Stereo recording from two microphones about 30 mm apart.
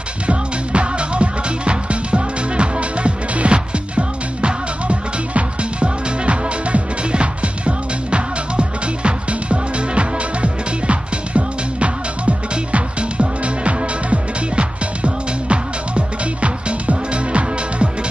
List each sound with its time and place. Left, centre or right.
0.3 s music: right